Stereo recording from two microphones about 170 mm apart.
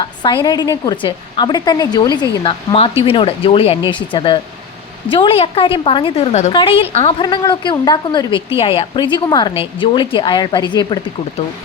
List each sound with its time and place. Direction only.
0.0 s a woman's voice: 25° left (ahead or behind)